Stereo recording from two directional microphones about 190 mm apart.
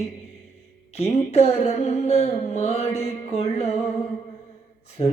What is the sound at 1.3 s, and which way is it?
Mantra, 35° left (ahead or behind).